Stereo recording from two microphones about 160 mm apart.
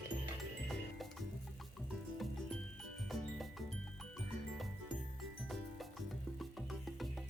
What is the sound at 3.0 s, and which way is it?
Music, centre (ahead or behind).